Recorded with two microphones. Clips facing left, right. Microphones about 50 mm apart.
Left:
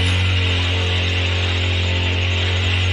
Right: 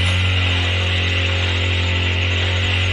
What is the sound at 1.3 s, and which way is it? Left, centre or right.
Hum, centre.